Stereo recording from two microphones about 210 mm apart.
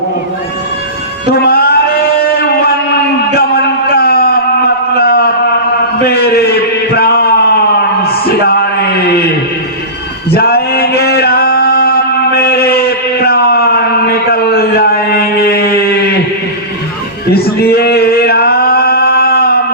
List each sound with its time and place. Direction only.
1.3 s a sound: 45° left (ahead or behind)
10.3 s male singing: 45° left (ahead or behind)
17.6 s male singing: 50° left (ahead or behind)